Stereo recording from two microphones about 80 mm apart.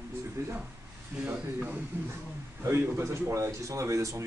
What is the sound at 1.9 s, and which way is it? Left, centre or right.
Speech, right.